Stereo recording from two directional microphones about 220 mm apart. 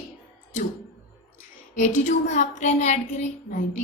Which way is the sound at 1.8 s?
35° left (ahead or behind).